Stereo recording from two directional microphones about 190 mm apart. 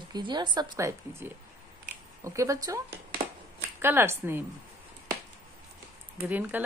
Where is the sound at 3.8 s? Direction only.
10° right (ahead or behind).